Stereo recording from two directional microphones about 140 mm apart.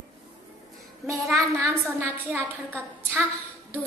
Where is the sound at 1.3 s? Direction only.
20° right (ahead or behind).